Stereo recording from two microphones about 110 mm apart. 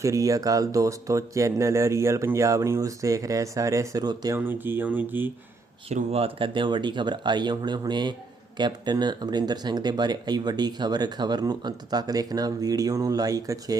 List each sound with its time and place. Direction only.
0.0 s speech: 30° right (ahead or behind)
4.4 s speech: 20° right (ahead or behind)
5.9 s speech: 70° right (ahead or behind); by 13.7 s 35° right (ahead or behind)